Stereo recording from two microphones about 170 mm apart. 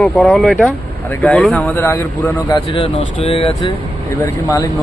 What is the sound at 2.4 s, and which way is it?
Speech, 30° left (ahead or behind).